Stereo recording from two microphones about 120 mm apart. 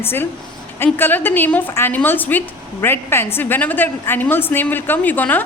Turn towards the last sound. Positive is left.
turn(degrees=15)  # may be behind; listen again after turning